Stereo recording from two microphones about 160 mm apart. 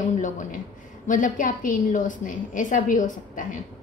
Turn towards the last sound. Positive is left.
turn(degrees=55)  # may be behind; listen again after turning